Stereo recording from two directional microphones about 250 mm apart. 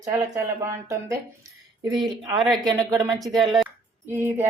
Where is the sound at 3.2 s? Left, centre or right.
Centre.